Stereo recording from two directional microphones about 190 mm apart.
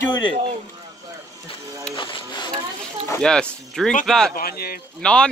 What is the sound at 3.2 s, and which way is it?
A man's voice, 5° left (ahead or behind).